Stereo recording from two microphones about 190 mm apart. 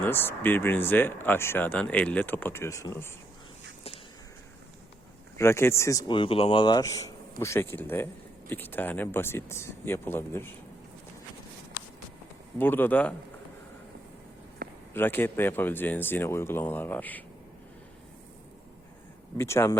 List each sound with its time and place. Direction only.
0.0 s speech: 10° left (ahead or behind)
5.4 s speech: 15° left (ahead or behind)
12.5 s speech: 10° left (ahead or behind)
14.6 s a sound: 50° right (ahead or behind)
14.9 s speech: 10° left (ahead or behind)
19.4 s speech: 15° left (ahead or behind)